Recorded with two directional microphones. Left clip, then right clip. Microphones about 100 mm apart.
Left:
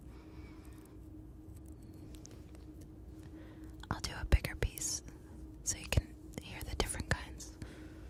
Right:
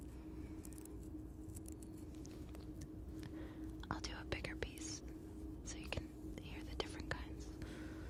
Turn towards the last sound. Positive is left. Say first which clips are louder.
# left 7 dB
turn(degrees=35)  # may be behind; listen again after turning